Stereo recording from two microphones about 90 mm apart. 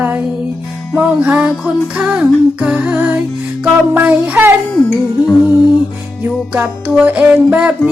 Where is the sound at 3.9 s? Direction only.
20° right (ahead or behind).